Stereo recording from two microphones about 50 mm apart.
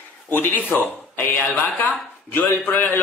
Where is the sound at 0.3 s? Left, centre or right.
Left.